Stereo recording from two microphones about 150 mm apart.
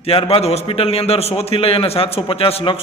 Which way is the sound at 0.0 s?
40° left (ahead or behind).